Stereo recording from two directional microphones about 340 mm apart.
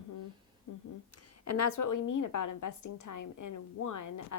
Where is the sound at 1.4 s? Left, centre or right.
Left.